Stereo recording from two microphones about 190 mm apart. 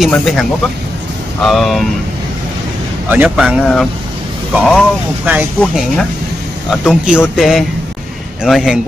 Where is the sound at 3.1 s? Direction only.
10° right (ahead or behind).